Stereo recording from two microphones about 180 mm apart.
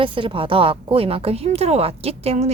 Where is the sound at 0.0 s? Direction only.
30° right (ahead or behind).